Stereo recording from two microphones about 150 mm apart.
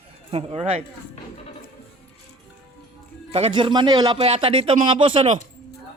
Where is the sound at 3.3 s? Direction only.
40° right (ahead or behind).